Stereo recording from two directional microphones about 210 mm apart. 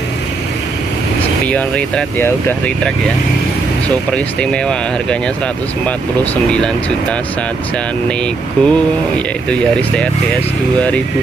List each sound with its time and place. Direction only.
1.4 s speech: 5° left (ahead or behind)
4.1 s speech: 5° left (ahead or behind)
6.5 s speech: 5° left (ahead or behind)
8.6 s speech: 5° left (ahead or behind)